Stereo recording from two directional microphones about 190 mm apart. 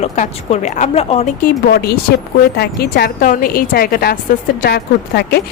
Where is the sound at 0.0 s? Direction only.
35° left (ahead or behind).